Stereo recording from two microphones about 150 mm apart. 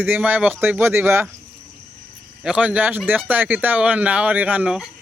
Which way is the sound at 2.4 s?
10° right (ahead or behind).